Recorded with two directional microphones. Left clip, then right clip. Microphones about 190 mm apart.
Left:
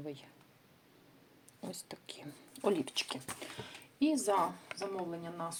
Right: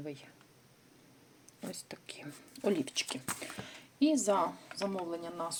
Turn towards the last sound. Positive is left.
turn(degrees=-35)  # may be behind; listen again after turning